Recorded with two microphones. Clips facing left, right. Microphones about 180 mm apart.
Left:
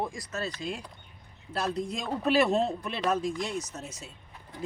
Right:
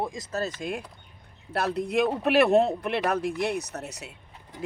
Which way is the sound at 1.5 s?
65° right (ahead or behind).